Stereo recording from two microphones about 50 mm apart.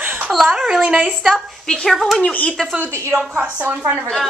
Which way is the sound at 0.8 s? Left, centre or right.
Right.